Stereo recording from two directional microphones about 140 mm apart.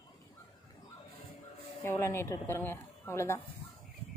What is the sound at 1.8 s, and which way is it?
A woman's voice, 20° left (ahead or behind).